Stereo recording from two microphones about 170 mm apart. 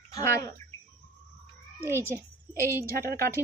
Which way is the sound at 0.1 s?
20° left (ahead or behind).